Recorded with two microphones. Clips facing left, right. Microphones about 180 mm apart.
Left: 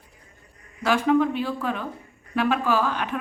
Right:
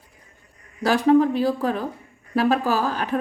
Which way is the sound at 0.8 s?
35° right (ahead or behind).